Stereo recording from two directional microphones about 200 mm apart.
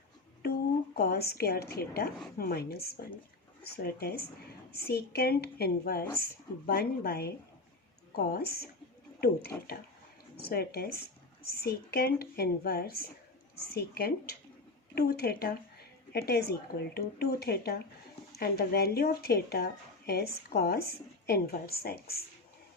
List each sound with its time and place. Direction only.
0.9 s a woman's voice: 50° left (ahead or behind)
9.5 s speech: 10° left (ahead or behind)
10.3 s a woman's voice: 50° left (ahead or behind)